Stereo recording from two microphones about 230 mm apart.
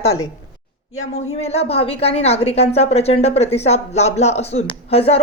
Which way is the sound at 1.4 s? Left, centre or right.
Left.